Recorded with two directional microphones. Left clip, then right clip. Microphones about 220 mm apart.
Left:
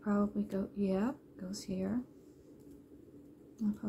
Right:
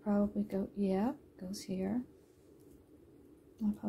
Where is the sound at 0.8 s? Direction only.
15° right (ahead or behind).